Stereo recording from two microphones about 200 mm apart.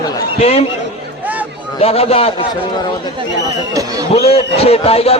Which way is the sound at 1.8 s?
30° left (ahead or behind).